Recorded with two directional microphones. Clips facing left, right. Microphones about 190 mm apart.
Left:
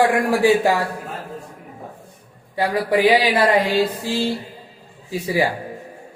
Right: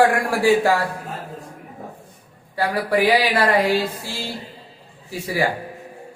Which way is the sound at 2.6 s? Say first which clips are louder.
Left 2 dB; 20° left (ahead or behind).